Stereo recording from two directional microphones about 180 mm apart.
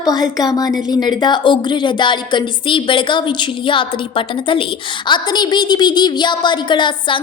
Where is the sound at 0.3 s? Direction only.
20° left (ahead or behind).